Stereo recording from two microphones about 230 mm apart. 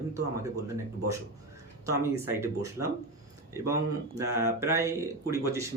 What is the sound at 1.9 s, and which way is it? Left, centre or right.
Speech, centre.